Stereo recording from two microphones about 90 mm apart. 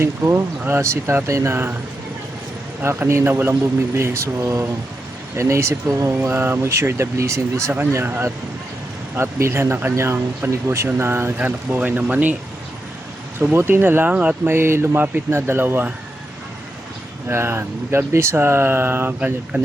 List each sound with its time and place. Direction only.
0.0 s speech: 30° right (ahead or behind)
2.8 s speech: 25° right (ahead or behind)
13.4 s speech: 25° right (ahead or behind)
17.2 s speech: 25° right (ahead or behind)